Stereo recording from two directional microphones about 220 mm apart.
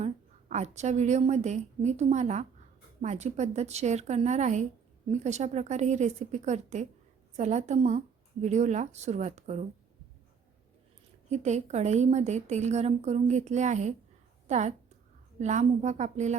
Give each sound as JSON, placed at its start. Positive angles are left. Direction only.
{"t": 0.0, "sound": "a woman's voice", "side_deg": -30}
{"t": 11.3, "sound": "a woman's voice", "side_deg": -30}